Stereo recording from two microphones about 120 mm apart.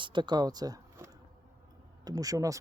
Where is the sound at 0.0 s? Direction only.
40° right (ahead or behind).